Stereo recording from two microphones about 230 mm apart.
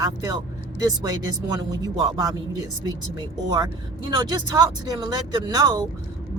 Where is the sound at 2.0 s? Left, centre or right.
Centre.